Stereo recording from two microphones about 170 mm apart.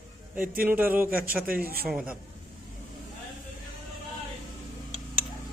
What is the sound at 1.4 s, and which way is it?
Speech, 60° right (ahead or behind).